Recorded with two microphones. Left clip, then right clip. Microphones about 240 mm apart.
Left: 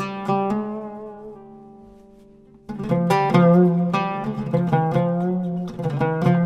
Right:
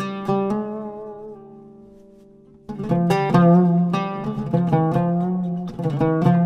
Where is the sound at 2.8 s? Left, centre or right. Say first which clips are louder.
Left 1 dB; right.